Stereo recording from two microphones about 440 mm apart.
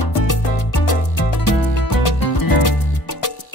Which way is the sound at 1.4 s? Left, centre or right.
Left.